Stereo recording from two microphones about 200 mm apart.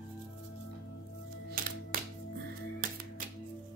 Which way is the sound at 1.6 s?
45° right (ahead or behind).